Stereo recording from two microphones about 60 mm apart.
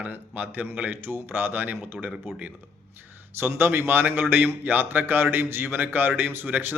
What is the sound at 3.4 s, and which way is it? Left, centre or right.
A man's voice, right.